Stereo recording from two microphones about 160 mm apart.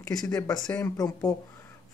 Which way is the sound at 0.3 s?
20° left (ahead or behind).